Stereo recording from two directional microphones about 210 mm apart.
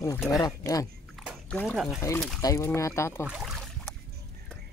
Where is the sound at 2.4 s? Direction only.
15° left (ahead or behind).